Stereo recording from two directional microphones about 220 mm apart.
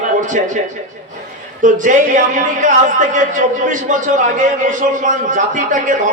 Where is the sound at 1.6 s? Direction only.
35° right (ahead or behind).